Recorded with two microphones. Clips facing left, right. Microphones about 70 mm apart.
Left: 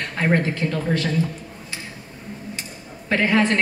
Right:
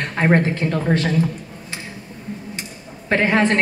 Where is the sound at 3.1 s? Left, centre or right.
Right.